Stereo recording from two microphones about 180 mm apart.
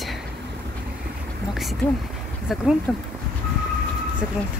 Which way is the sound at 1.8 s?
10° left (ahead or behind).